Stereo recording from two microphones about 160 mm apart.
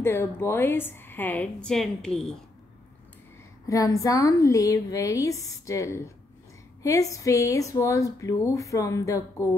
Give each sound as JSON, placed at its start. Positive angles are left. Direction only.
{"t": 0.0, "sound": "a woman's voice", "side_deg": 15}
{"t": 3.6, "sound": "a woman's voice", "side_deg": 20}